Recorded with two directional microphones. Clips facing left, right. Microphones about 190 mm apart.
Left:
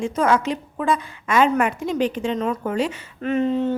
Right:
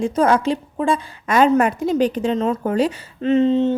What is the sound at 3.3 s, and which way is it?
Speech, 25° right (ahead or behind).